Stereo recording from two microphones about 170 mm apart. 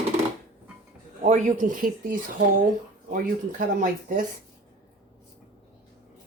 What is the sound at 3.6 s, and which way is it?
Speech, 55° right (ahead or behind).